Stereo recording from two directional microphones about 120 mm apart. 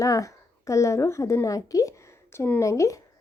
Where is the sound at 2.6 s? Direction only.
25° left (ahead or behind).